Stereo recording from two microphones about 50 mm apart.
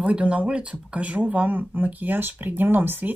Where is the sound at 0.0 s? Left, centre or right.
Right.